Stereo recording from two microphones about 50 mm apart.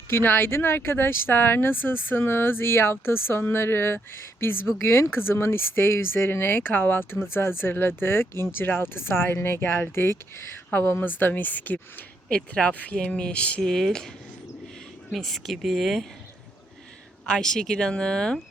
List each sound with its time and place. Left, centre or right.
0.1 s speech: left
10.7 s speech: left
12.3 s speech: left
13.6 s speech: centre
15.1 s speech: centre
17.2 s speech: centre